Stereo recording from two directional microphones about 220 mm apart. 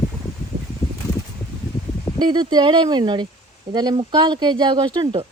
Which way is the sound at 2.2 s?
20° right (ahead or behind).